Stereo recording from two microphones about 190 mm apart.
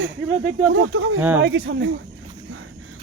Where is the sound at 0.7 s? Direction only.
90° right.